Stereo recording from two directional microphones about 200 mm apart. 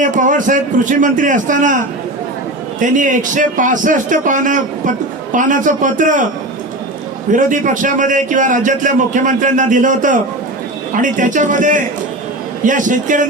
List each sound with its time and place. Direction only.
0.0 s a man's voice: 40° right (ahead or behind)
2.8 s a man's voice: 40° right (ahead or behind)
7.3 s a man's voice: 40° right (ahead or behind)